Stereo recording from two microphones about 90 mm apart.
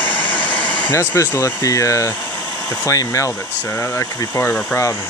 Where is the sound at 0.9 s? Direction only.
35° left (ahead or behind).